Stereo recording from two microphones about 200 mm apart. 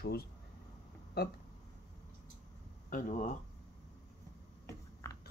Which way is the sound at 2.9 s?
40° left (ahead or behind).